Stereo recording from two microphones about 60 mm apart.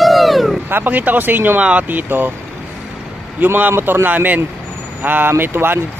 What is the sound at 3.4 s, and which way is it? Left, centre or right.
Speech, right.